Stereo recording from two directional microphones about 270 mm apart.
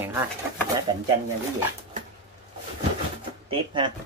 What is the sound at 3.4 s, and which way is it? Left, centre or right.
Speech, centre.